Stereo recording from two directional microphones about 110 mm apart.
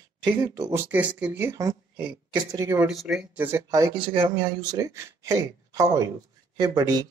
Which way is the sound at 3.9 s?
50° right (ahead or behind).